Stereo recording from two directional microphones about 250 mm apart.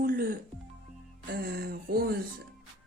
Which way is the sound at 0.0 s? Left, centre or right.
Right.